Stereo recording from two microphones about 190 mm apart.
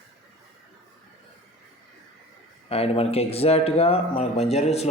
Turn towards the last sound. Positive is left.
turn(degrees=35)  # may be behind; listen again after turning